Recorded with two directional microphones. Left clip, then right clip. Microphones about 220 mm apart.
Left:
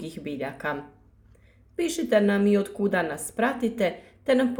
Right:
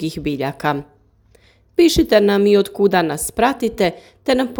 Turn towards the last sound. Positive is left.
turn(degrees=-40)  # may be behind; listen again after turning